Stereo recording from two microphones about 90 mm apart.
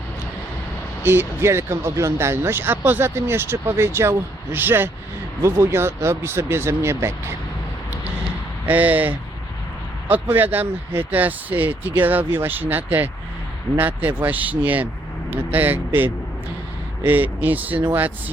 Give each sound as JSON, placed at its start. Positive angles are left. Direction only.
{"t": 1.0, "sound": "speech", "side_deg": -25}
{"t": 8.6, "sound": "speech", "side_deg": -20}